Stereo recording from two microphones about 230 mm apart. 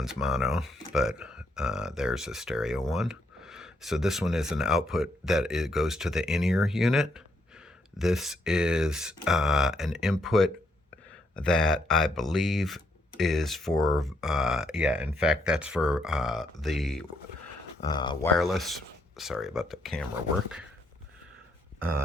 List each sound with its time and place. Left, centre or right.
0.0 s speech: centre
17.8 s speech: centre
18.3 s speech: centre